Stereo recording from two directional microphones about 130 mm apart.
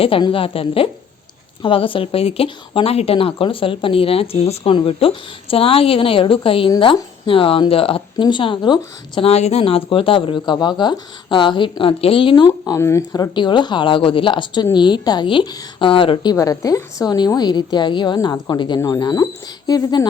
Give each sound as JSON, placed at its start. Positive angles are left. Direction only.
{"t": 0.0, "sound": "speech", "side_deg": 45}
{"t": 9.3, "sound": "speech", "side_deg": 55}
{"t": 16.3, "sound": "speech", "side_deg": 25}